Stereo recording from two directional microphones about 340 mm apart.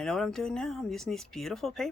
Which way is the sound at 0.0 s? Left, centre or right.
Centre.